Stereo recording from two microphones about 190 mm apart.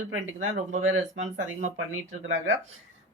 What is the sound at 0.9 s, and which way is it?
Speech, 80° right.